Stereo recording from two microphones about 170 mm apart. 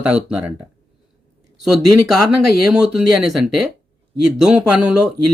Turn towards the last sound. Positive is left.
turn(degrees=-5)  # may be behind; listen again after turning